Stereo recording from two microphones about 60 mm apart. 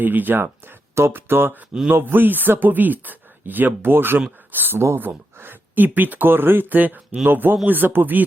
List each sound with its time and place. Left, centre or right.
0.0 s speech: right